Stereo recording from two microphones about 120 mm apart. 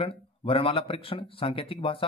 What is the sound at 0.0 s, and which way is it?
A man's voice, 50° left (ahead or behind).